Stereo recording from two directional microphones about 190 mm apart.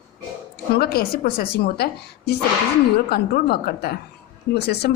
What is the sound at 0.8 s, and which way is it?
A woman's voice, 55° left (ahead or behind).